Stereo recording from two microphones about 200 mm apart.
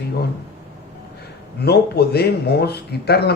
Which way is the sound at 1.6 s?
55° left (ahead or behind).